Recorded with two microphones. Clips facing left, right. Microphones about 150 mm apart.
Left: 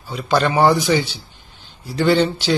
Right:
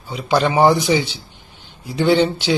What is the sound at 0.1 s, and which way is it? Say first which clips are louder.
Speech: right 1 dB; 10° right (ahead or behind).